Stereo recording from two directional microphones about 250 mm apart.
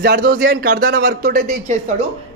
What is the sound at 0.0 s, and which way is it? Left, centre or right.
Speech, right.